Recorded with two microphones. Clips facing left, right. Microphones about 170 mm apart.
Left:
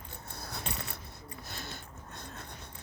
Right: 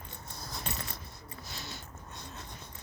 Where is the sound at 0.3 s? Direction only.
60° left (ahead or behind).